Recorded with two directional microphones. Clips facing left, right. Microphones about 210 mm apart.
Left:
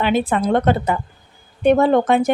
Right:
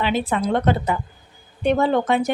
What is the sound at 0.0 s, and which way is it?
Speech, 50° left (ahead or behind).